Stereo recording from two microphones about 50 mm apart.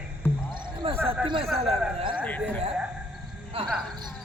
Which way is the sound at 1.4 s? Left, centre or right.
Centre.